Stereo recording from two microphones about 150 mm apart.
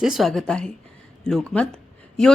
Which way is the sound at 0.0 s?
Centre (ahead or behind).